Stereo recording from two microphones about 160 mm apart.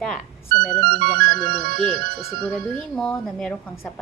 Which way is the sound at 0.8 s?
90° right.